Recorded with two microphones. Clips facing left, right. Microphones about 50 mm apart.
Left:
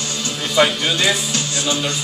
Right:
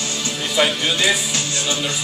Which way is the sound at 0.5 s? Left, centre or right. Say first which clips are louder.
Left 3 dB; centre.